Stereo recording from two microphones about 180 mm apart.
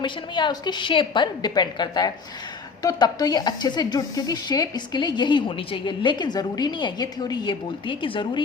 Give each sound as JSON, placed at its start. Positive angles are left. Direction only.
{"t": 0.0, "sound": "speech", "side_deg": 25}